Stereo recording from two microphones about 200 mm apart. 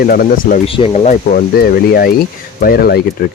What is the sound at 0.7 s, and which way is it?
Speech, 25° left (ahead or behind).